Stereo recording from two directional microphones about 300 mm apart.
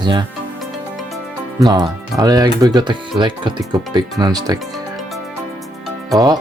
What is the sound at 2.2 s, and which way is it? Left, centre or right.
Speech, centre.